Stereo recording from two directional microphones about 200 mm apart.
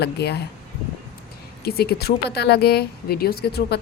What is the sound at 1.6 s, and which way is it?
A woman's voice, 50° left (ahead or behind).